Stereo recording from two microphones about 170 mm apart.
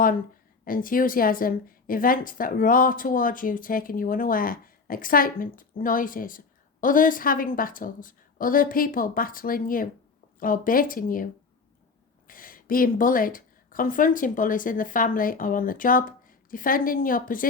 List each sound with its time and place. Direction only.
0.6 s a woman's voice: 55° left (ahead or behind)
12.3 s speech: 55° left (ahead or behind)